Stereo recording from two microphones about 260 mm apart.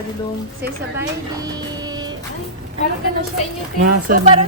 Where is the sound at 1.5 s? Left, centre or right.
Centre.